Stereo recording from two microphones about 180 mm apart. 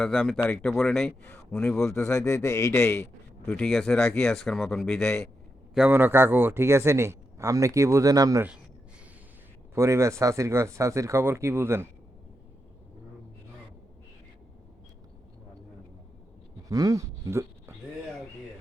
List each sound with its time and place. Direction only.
0.0 s speech: centre (ahead or behind)
1.9 s speech: 15° left (ahead or behind)
3.4 s speech: centre (ahead or behind)
5.7 s a man's voice: 10° right (ahead or behind)
9.7 s a man's voice: 15° right (ahead or behind)
16.6 s speech: 20° right (ahead or behind)